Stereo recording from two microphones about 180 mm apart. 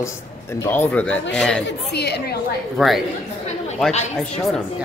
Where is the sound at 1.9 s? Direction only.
65° left (ahead or behind).